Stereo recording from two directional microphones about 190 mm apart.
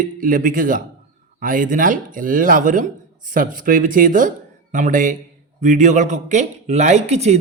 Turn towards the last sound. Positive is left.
turn(degrees=-35)  # may be behind; listen again after turning